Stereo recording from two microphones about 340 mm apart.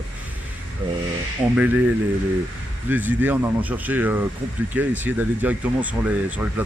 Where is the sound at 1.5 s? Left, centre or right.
Centre.